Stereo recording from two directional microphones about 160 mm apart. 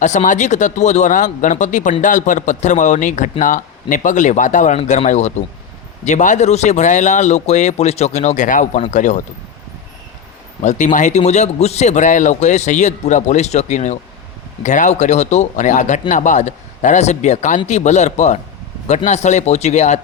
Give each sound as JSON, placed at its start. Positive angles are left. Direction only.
{"t": 0.0, "sound": "speech", "side_deg": 50}
{"t": 10.6, "sound": "speech", "side_deg": 50}